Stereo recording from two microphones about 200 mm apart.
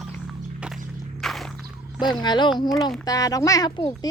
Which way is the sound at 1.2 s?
Centre (ahead or behind).